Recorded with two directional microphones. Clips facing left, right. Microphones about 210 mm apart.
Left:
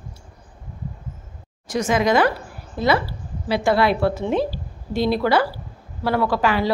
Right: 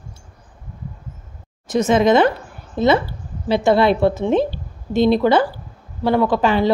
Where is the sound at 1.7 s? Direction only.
25° right (ahead or behind).